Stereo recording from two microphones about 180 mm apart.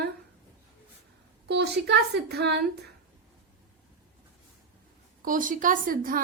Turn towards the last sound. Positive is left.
turn(degrees=-50)  # may be behind; listen again after turning